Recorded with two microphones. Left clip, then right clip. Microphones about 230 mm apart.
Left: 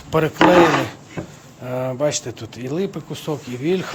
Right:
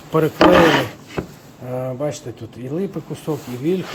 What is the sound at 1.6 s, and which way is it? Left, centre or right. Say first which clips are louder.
Speech: left 3 dB; centre.